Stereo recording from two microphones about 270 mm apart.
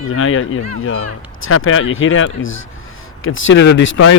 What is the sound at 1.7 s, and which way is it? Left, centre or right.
Speech, left.